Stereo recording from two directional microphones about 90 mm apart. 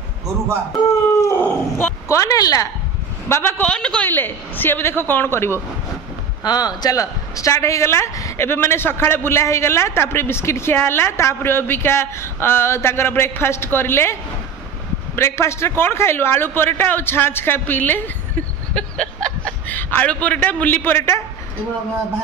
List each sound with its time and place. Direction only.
1.4 s wild animals: 20° left (ahead or behind)
2.0 s speech: 40° left (ahead or behind)
3.3 s speech: 25° left (ahead or behind); by 4.1 s 10° left (ahead or behind)
4.1 s speech: 20° left (ahead or behind)
6.4 s speech: 50° left (ahead or behind); by 14.1 s 25° left (ahead or behind)
15.1 s a man's voice: 30° left (ahead or behind)